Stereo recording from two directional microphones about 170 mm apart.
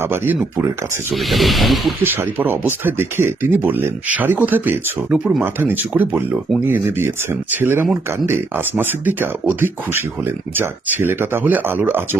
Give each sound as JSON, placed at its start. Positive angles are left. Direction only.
{"t": 0.0, "sound": "speech", "side_deg": -15}
{"t": 1.1, "sound": "speech", "side_deg": 0}
{"t": 2.1, "sound": "speech", "side_deg": -10}